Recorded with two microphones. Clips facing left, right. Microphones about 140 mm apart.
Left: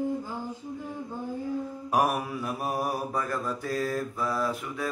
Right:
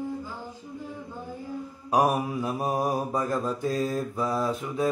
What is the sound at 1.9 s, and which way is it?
Mantra, 20° right (ahead or behind).